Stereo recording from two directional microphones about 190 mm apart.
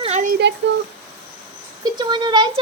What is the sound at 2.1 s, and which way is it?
Speech, 25° right (ahead or behind).